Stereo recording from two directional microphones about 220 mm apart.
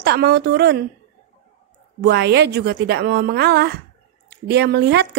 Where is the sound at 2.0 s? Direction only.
50° right (ahead or behind).